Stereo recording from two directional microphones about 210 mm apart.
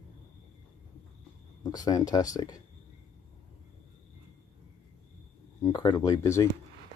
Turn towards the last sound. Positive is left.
turn(degrees=15)  # may be behind; listen again after turning